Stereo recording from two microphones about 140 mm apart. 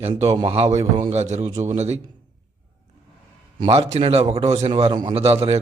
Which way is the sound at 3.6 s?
45° right (ahead or behind).